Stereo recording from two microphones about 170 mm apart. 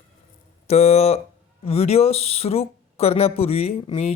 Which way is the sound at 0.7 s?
40° left (ahead or behind).